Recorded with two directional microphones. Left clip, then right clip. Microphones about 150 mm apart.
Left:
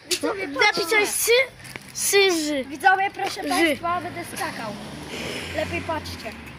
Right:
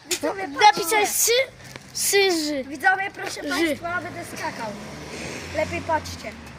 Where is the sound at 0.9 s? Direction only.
30° right (ahead or behind).